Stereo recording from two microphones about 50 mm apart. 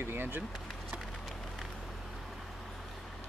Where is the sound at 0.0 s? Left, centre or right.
Right.